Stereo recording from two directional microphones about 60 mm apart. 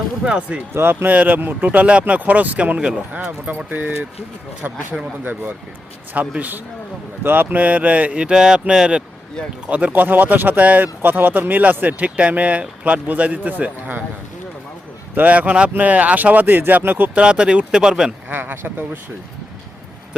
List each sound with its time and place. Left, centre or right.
0.3 s speech: right
0.7 s speech: right
1.0 s speech: right
9.6 s speech: right
15.1 s speech: right
17.2 s speech: centre
18.3 s speech: right